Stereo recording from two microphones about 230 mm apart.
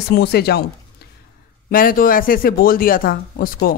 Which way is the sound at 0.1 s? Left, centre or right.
Left.